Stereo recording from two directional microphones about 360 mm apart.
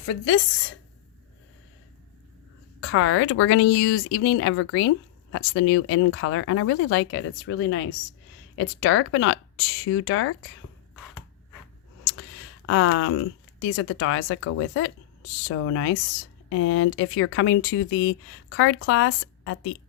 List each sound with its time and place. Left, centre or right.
0.0 s speech: left
2.8 s speech: left
12.6 s speech: left